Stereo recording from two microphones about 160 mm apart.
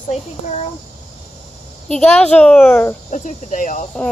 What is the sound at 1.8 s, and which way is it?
Speech, 5° left (ahead or behind).